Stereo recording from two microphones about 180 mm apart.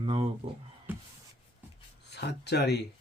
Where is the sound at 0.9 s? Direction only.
10° right (ahead or behind).